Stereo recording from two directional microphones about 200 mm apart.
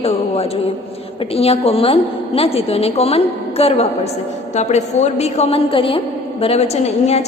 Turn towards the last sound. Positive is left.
turn(degrees=30)  # may be behind; listen again after turning